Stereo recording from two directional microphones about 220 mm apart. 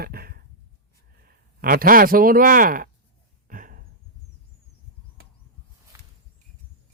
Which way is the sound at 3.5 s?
40° right (ahead or behind).